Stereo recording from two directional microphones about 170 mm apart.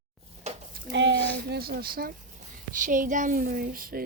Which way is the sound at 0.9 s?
90° right.